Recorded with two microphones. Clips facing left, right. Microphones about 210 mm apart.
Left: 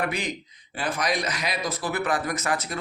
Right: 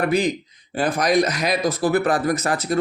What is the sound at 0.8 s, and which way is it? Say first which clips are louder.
Speech: right 9 dB; 45° right (ahead or behind).